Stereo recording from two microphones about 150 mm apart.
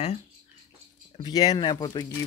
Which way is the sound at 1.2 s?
25° left (ahead or behind).